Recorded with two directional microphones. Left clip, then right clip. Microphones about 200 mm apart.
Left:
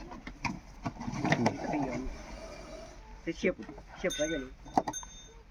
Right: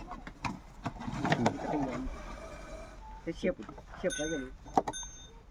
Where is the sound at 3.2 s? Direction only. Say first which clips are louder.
Left 2 dB; 35° right (ahead or behind).